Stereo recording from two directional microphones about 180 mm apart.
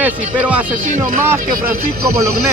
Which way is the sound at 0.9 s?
50° right (ahead or behind).